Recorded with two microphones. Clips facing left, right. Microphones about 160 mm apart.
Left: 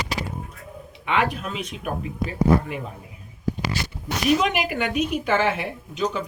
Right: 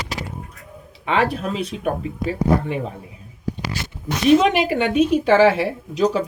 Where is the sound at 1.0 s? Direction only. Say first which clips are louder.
Right 4 dB; 35° right (ahead or behind).